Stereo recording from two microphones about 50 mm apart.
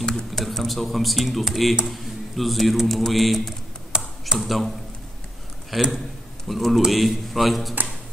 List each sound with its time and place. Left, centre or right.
0.1 s a man's voice: centre
3.9 s computer keyboard: centre
4.4 s a man's voice: centre